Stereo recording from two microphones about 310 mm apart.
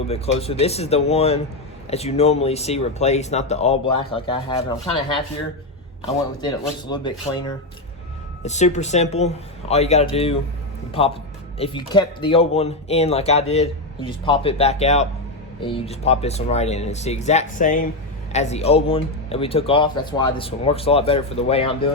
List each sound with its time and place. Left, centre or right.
0.1 s speech: centre
6.4 s speech: centre
11.5 s speech: centre